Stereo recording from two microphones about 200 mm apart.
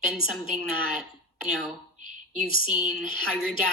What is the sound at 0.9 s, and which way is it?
A woman's voice, 5° right (ahead or behind).